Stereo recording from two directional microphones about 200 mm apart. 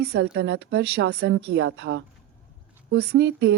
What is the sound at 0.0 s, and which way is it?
Speech, 55° right (ahead or behind).